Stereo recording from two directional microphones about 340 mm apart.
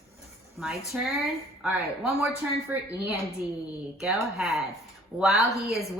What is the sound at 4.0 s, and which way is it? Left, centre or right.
A woman's voice, centre.